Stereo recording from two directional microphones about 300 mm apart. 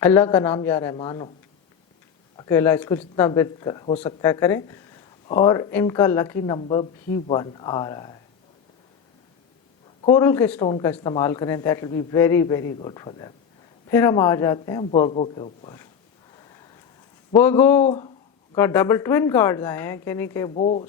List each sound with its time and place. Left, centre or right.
0.0 s speech: centre
2.3 s speech: centre
10.0 s speech: centre
17.3 s speech: centre
20.5 s speech: left